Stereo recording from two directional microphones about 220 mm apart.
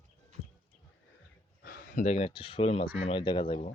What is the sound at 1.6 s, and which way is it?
Speech, 45° left (ahead or behind).